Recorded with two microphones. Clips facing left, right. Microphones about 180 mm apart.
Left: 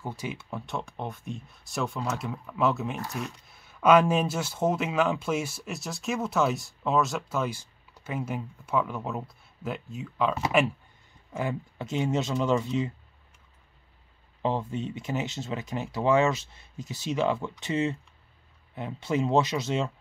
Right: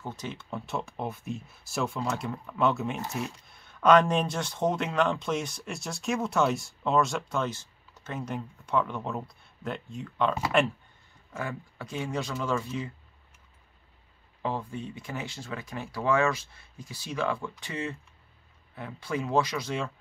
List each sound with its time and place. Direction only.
0.0 s speech: 10° left (ahead or behind)
11.3 s speech: 20° left (ahead or behind)
14.4 s speech: 20° left (ahead or behind)